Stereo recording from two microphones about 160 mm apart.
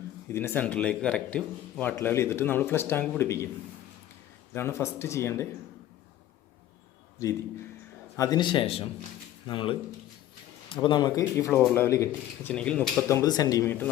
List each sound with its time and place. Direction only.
0.3 s speech: 15° left (ahead or behind)
4.5 s speech: 15° left (ahead or behind)
7.2 s speech: 20° left (ahead or behind)
10.8 s speech: 30° left (ahead or behind); by 13.9 s 15° left (ahead or behind)